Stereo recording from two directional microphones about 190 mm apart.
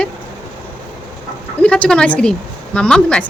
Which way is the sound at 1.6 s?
5° left (ahead or behind).